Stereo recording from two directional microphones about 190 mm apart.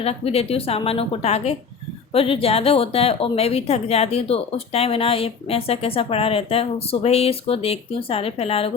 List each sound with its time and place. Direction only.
0.0 s a woman's voice: 30° left (ahead or behind)